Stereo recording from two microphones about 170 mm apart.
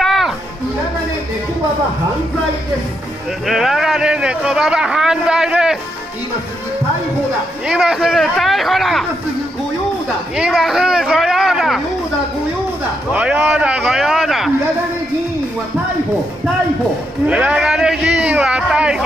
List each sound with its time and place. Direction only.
0.0 s music: centre (ahead or behind)
3.4 s a man's voice: centre (ahead or behind)
7.6 s a man's voice: 5° right (ahead or behind)
10.3 s speech: 5° right (ahead or behind)
13.1 s speech: 10° right (ahead or behind)
17.3 s a man's voice: 5° right (ahead or behind)